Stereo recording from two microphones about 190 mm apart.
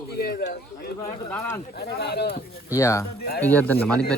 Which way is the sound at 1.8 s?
55° left (ahead or behind).